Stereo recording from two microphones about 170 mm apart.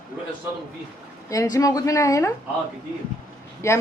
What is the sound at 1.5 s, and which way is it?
Speech, 20° left (ahead or behind).